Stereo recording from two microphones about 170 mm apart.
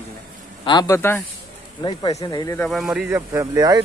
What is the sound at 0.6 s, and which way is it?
Speech, 25° left (ahead or behind).